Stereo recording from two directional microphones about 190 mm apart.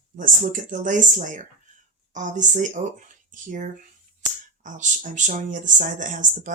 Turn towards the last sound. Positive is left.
turn(degrees=-40)  # may be behind; listen again after turning